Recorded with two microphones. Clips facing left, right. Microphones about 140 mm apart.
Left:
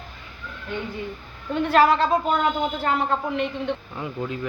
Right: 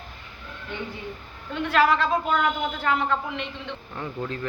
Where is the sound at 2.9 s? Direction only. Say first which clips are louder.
Right 1 dB; 45° left (ahead or behind).